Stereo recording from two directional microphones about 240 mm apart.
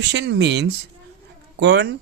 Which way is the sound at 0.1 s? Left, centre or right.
Right.